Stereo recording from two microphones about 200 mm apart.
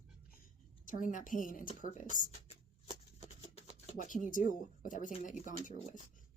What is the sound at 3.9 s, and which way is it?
Speech, 40° left (ahead or behind).